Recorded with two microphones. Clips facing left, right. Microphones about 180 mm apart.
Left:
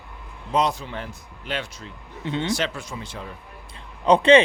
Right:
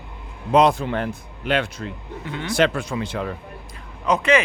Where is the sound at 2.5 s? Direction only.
60° right (ahead or behind).